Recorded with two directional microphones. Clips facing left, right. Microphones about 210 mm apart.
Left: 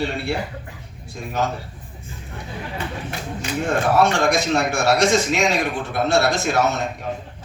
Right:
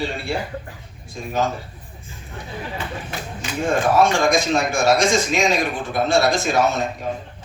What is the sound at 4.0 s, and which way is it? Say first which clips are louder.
A man's voice: right 1 dB; 65° left (ahead or behind).